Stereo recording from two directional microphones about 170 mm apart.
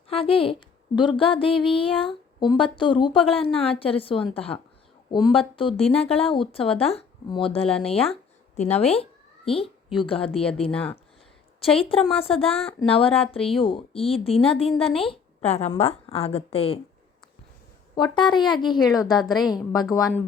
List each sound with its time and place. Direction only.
0.1 s a woman's voice: 35° left (ahead or behind)
11.8 s speech: 35° left (ahead or behind)
17.9 s a woman's voice: 25° left (ahead or behind)